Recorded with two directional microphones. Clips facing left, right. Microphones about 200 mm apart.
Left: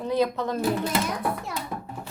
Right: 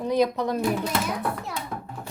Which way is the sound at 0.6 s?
Centre (ahead or behind).